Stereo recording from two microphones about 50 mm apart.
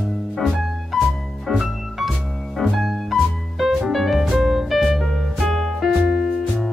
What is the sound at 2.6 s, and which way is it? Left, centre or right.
Music, centre.